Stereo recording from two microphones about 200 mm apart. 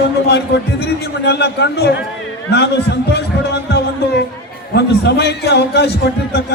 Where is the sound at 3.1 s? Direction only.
55° left (ahead or behind).